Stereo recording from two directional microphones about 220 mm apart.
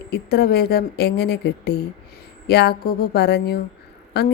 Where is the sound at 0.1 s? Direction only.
45° left (ahead or behind).